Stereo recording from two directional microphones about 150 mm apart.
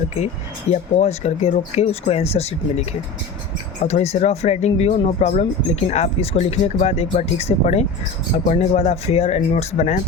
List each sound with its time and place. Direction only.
0.7 s speech: 50° left (ahead or behind)
3.8 s speech: 45° left (ahead or behind)